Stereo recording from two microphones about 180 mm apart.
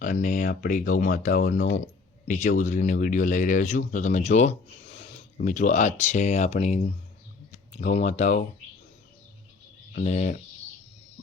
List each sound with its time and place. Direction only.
0.0 s speech: 45° left (ahead or behind)
9.9 s speech: 40° left (ahead or behind)